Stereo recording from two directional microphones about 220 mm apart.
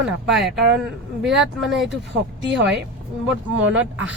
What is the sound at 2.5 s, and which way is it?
Speech, 55° right (ahead or behind).